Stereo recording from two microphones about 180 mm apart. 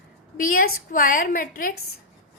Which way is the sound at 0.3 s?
50° left (ahead or behind).